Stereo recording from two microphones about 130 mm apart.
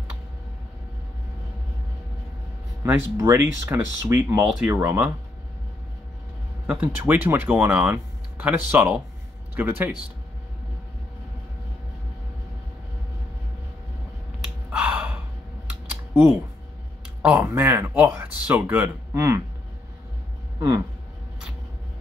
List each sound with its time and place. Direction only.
2.8 s speech: 20° right (ahead or behind)
4.4 s speech: 10° right (ahead or behind)
6.7 s speech: 10° right (ahead or behind)
14.4 s gasp: 10° right (ahead or behind)
15.9 s typing: 10° right (ahead or behind)
17.2 s speech: 10° right (ahead or behind)
20.5 s speech: 25° right (ahead or behind)